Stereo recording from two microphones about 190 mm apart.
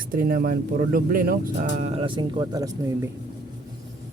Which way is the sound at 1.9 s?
25° right (ahead or behind).